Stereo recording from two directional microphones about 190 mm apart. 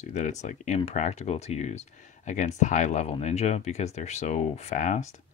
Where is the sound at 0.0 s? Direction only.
40° left (ahead or behind).